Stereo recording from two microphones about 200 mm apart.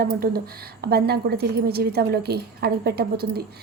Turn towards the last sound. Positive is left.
turn(degrees=-50)  # may be behind; listen again after turning